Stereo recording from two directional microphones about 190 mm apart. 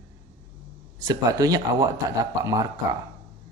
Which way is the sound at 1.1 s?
20° right (ahead or behind).